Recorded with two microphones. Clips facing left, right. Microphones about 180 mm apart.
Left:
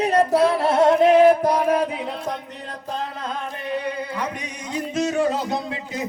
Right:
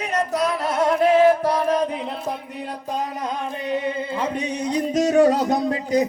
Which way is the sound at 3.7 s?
20° right (ahead or behind).